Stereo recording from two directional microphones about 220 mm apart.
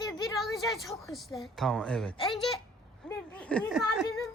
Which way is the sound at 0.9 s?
Centre (ahead or behind).